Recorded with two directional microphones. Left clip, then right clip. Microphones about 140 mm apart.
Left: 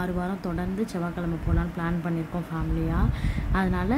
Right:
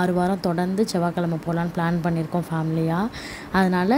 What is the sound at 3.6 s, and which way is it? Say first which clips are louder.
Speech: right 7 dB; 30° right (ahead or behind).